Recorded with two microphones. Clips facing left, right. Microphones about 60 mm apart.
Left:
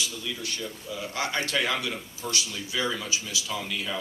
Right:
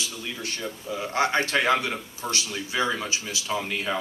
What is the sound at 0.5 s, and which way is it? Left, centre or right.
A man's voice, right.